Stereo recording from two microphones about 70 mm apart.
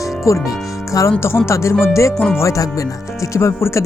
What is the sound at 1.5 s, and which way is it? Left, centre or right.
Music, left.